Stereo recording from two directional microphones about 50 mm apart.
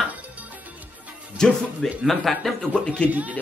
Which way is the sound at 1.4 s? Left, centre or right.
Centre.